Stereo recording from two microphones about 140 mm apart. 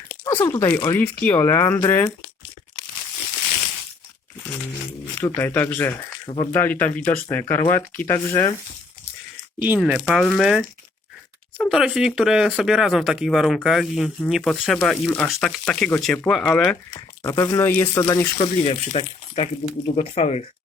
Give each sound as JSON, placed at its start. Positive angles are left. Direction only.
{"t": 0.3, "sound": "speech", "side_deg": 20}
{"t": 5.2, "sound": "speech", "side_deg": 15}
{"t": 6.2, "sound": "speech", "side_deg": 40}
{"t": 6.5, "sound": "speech", "side_deg": 15}
{"t": 9.6, "sound": "speech", "side_deg": -10}
{"t": 17.2, "sound": "speech", "side_deg": 25}
{"t": 18.3, "sound": "speech", "side_deg": 45}